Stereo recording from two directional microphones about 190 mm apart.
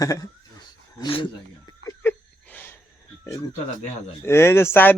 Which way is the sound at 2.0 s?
10° left (ahead or behind).